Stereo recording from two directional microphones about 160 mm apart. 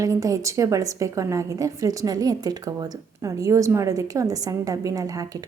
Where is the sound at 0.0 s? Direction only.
20° right (ahead or behind).